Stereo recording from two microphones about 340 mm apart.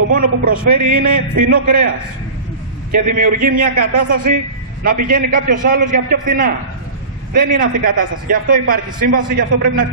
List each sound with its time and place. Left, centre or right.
0.1 s a man's voice: right
2.9 s a man's voice: right
7.5 s a man's voice: right